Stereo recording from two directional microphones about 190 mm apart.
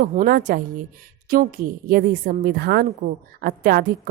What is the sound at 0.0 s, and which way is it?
A woman's voice, 45° right (ahead or behind).